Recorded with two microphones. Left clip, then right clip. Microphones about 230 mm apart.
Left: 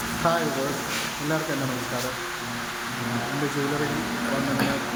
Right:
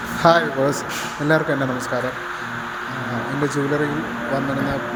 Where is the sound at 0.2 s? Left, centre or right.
Right.